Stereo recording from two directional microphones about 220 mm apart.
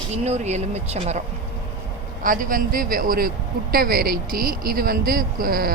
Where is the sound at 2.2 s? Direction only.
40° right (ahead or behind).